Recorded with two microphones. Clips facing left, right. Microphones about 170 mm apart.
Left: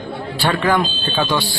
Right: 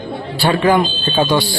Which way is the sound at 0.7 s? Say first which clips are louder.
Right 4 dB; 35° right (ahead or behind).